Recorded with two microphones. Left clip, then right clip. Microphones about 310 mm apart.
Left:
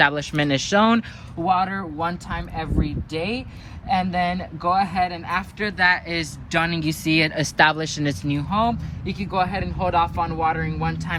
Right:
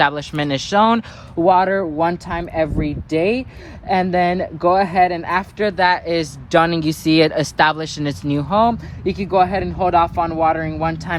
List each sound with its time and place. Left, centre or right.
0.0 s speech: centre
1.5 s speech: centre
2.6 s speech: right
3.9 s speech: centre